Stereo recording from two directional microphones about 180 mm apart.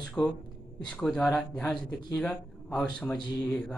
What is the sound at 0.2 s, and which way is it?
A man's voice, 5° left (ahead or behind).